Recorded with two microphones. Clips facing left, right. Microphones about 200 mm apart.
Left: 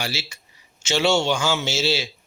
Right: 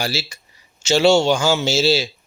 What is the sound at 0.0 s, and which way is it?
Speech, 35° right (ahead or behind).